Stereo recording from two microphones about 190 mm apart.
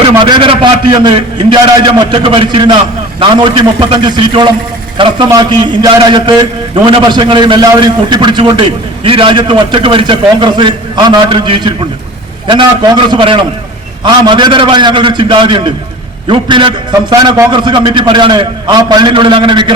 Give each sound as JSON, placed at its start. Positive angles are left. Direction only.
{"t": 0.2, "sound": "a man's voice", "side_deg": -25}